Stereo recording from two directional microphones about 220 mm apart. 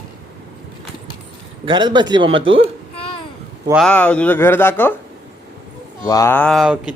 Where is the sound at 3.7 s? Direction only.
Centre (ahead or behind).